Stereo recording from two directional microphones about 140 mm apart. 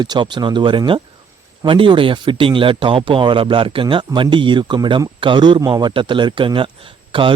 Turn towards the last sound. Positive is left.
turn(degrees=-35)  # may be behind; listen again after turning